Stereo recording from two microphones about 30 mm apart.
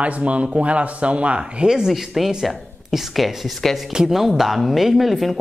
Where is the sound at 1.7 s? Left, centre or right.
Centre.